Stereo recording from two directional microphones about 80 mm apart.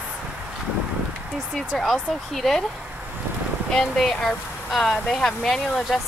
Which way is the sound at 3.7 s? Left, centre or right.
Centre.